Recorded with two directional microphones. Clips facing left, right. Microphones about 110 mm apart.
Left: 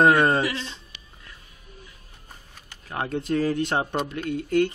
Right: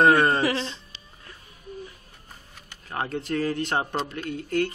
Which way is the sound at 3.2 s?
15° left (ahead or behind).